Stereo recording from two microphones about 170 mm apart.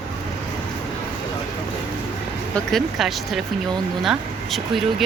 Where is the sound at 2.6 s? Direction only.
Centre (ahead or behind).